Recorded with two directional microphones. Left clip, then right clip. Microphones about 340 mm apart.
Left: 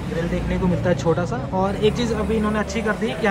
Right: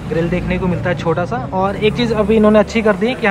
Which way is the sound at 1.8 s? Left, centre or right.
Left.